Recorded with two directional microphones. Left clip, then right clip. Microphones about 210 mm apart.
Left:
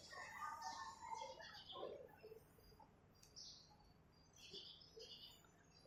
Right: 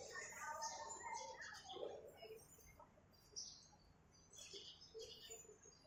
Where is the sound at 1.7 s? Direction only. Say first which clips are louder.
Right 1 dB; 45° right (ahead or behind).